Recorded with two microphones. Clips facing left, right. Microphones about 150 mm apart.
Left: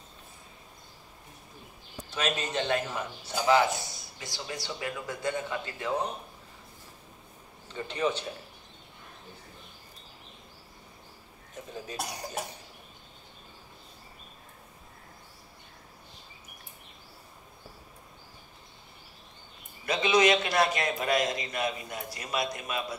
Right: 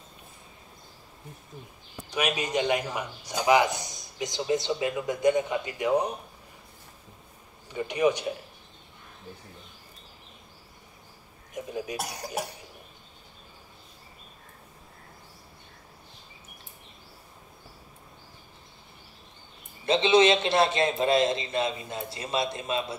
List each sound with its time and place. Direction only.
2.0 s a man's voice: 15° right (ahead or behind)
7.7 s a man's voice: 15° right (ahead or behind)
11.5 s a sound: 15° right (ahead or behind)
19.9 s a man's voice: 25° right (ahead or behind)